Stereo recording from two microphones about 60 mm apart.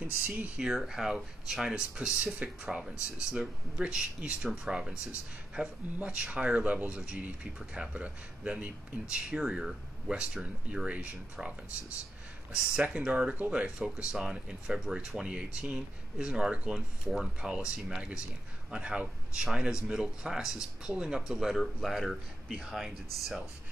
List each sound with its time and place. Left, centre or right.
0.0 s speech: right
0.7 s speech: centre
5.9 s speech: right
12.8 s speech: right
21.5 s speech: centre
22.7 s speech: centre